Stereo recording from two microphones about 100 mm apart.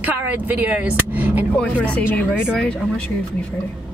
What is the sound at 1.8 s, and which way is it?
Speech, 15° left (ahead or behind).